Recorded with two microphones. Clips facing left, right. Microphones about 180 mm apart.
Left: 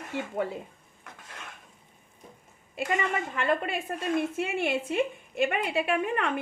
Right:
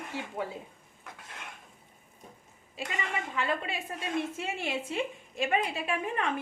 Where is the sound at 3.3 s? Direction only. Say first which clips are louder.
Left 3 dB; 55° left (ahead or behind).